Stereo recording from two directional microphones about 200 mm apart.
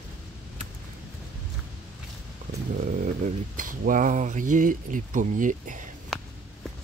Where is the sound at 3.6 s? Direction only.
40° right (ahead or behind).